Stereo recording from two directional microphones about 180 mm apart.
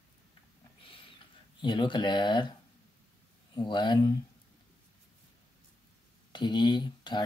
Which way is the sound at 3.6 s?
25° left (ahead or behind).